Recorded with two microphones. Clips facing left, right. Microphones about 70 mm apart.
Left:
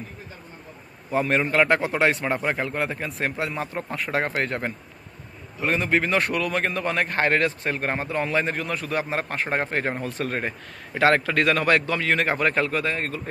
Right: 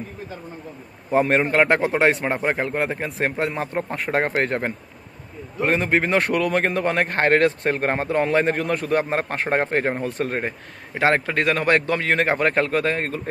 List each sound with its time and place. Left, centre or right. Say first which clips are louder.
1.1 s a man's voice: right 3 dB; right
2.4 s a man's voice: right 3 dB; right
9.6 s a man's voice: right 5 dB; right
10.0 s a man's voice: right 4 dB; right
11.0 s speech: even; right
11.8 s a man's voice: right 2 dB; right